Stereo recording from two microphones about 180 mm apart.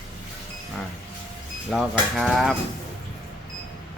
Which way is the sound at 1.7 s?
Centre (ahead or behind).